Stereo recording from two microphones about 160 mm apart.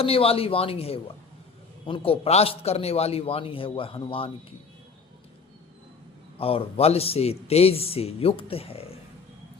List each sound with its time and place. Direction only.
0.0 s speech: 35° left (ahead or behind)
6.4 s speech: 40° left (ahead or behind)